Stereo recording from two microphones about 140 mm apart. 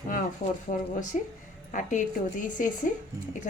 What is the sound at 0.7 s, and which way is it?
A woman's voice, 60° left (ahead or behind).